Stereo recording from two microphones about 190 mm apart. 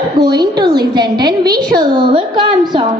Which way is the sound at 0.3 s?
20° right (ahead or behind).